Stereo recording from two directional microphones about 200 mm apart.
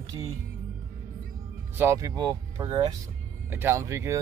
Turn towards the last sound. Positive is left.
turn(degrees=-15)  # may be behind; listen again after turning